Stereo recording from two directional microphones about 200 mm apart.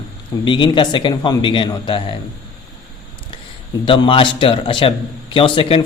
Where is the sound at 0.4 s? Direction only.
25° left (ahead or behind).